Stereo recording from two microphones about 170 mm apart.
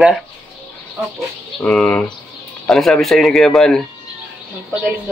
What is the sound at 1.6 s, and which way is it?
Speech, 5° left (ahead or behind).